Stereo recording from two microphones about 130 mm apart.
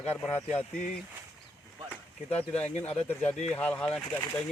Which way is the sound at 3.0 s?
10° left (ahead or behind).